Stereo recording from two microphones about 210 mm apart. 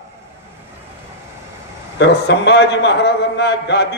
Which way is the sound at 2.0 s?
55° left (ahead or behind).